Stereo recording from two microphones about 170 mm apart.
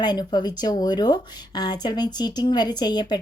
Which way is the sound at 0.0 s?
25° left (ahead or behind).